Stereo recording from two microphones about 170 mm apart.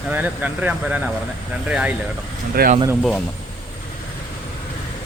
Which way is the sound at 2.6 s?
65° right (ahead or behind).